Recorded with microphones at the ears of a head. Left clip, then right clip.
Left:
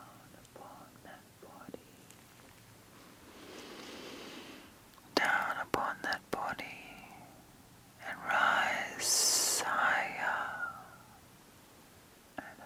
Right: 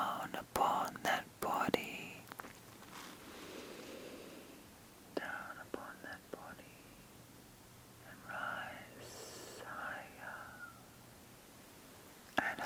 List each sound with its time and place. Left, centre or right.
0.0 s whispering: right
4.3 s a sound: left
5.1 s whispering: left
8.0 s whispering: left
12.3 s whispering: right